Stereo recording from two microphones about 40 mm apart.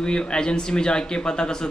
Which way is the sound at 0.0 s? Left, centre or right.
Left.